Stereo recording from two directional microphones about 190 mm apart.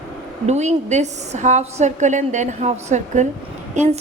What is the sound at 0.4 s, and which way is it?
A woman's voice, 35° right (ahead or behind).